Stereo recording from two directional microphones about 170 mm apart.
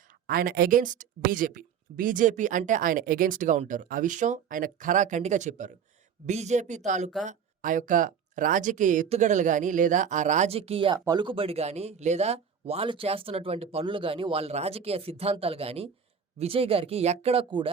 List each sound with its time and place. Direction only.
0.3 s a woman's voice: 60° right (ahead or behind); by 17.7 s 35° right (ahead or behind)